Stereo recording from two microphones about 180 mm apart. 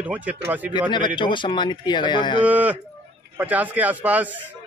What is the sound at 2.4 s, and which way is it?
A man's voice, 10° right (ahead or behind).